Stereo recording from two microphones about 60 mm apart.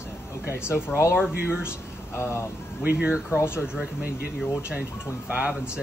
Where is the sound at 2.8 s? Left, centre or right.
Centre.